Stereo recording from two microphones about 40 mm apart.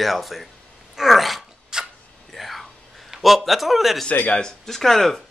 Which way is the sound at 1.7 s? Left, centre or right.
Centre.